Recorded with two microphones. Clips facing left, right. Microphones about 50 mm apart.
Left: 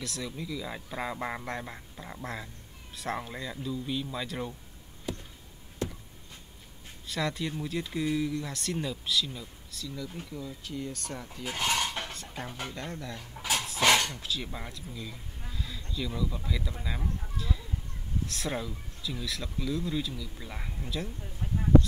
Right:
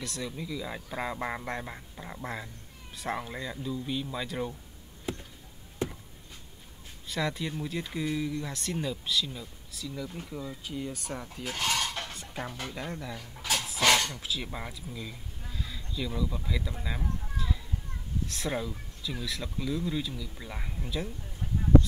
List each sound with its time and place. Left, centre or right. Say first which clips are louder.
0.0 s speech: even; centre
5.1 s a sound: right 1 dB; right
7.1 s speech: even; centre
10.3 s speech: right 2 dB; centre
11.4 s dishes: left 1 dB; centre
12.1 s music: right 1 dB; centre
12.7 s speech: right 1 dB; centre
13.2 s drawer open or close: left 1 dB; centre
13.7 s dog: even; centre
14.1 s speech: even; centre